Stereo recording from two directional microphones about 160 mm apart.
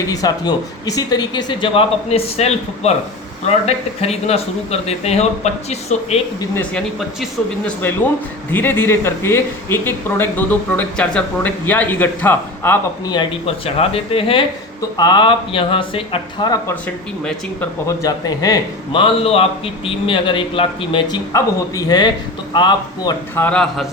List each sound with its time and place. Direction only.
0.1 s a man's voice: 25° left (ahead or behind); by 6.2 s 40° left (ahead or behind)
6.4 s speech: 15° left (ahead or behind)
8.5 s speech: 15° left (ahead or behind)
13.1 s a man's voice: 30° left (ahead or behind)
16.8 s speech: 10° left (ahead or behind)
18.0 s a man's voice: 25° left (ahead or behind)
23.3 s speech: 10° left (ahead or behind)